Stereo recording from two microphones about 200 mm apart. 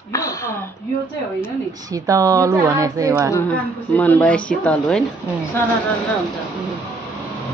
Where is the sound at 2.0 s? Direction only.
15° right (ahead or behind).